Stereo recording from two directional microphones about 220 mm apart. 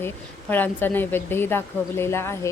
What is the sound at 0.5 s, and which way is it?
A woman's voice, 10° left (ahead or behind).